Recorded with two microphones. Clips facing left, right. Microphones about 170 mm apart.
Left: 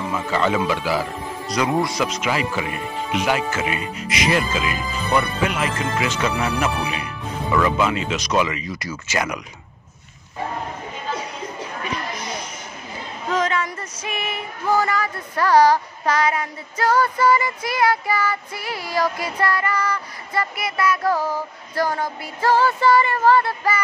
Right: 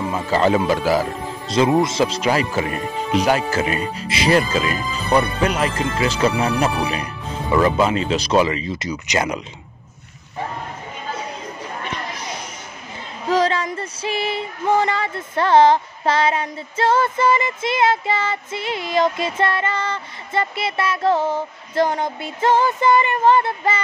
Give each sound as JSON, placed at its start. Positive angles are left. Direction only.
{"t": 0.1, "sound": "speech", "side_deg": -35}
{"t": 1.5, "sound": "speech", "side_deg": -25}
{"t": 7.5, "sound": "female singing", "side_deg": -35}
{"t": 13.3, "sound": "female singing", "side_deg": -30}